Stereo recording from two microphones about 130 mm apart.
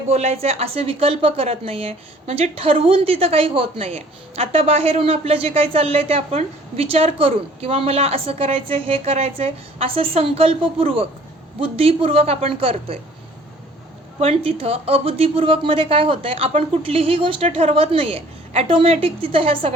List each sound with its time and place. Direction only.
0.1 s a woman's voice: 55° right (ahead or behind)
14.2 s a woman's voice: 50° right (ahead or behind)